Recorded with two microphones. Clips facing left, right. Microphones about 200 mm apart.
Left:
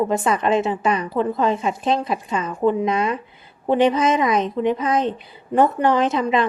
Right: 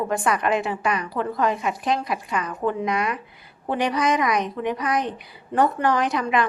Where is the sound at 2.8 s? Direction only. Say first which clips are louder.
Left 4 dB; 30° left (ahead or behind).